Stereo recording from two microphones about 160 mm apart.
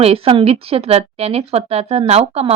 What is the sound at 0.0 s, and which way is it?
Speech, 35° right (ahead or behind).